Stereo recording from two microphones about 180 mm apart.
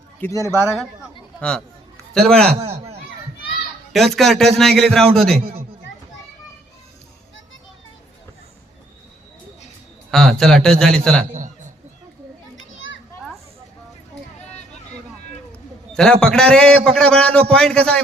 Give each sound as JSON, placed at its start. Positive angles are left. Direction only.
{"t": 0.2, "sound": "a man's voice", "side_deg": 15}
{"t": 2.6, "sound": "speech", "side_deg": -35}
{"t": 3.9, "sound": "a man's voice", "side_deg": 0}
{"t": 10.1, "sound": "a man's voice", "side_deg": 0}
{"t": 12.5, "sound": "children playing", "side_deg": 90}
{"t": 15.9, "sound": "a man's voice", "side_deg": 5}